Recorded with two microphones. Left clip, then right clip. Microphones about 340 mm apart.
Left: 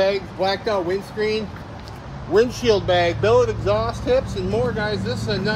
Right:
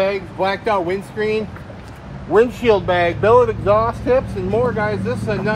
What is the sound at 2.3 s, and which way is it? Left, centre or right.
Speech, centre.